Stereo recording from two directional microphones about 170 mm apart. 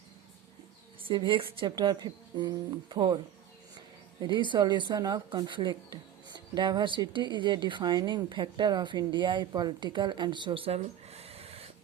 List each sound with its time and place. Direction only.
1.0 s speech: 30° right (ahead or behind)
4.2 s speech: 25° right (ahead or behind)